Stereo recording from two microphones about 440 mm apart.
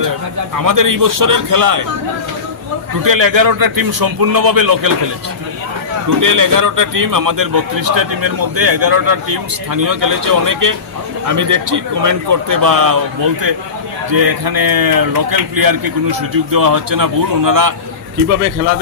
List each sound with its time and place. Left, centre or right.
0.6 s a man's voice: right
3.0 s a man's voice: right
6.1 s a man's voice: right
14.1 s a man's voice: right